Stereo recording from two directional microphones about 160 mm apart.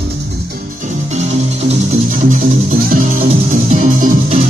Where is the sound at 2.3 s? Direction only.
55° right (ahead or behind).